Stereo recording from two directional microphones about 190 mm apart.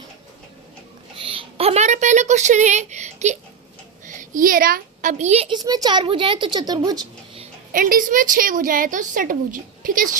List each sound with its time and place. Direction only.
1.1 s a sound: 30° right (ahead or behind)
4.0 s a woman's voice: 40° right (ahead or behind); by 7.4 s 20° right (ahead or behind)
7.7 s a woman's voice: 45° right (ahead or behind)